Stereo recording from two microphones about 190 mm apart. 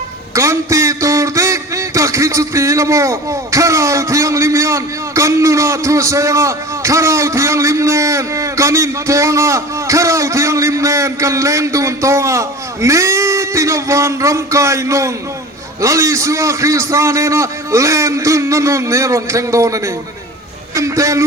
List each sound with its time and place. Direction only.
0.3 s a man's voice: 15° right (ahead or behind)